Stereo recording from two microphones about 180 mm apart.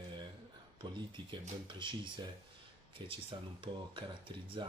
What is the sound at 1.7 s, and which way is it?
Speech, 25° right (ahead or behind).